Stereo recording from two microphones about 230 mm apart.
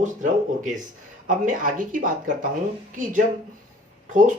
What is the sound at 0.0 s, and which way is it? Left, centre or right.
Speech, right.